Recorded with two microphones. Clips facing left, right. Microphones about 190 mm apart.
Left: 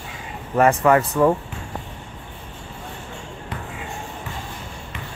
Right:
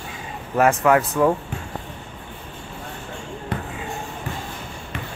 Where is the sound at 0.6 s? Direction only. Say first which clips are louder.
Left 1 dB; centre (ahead or behind).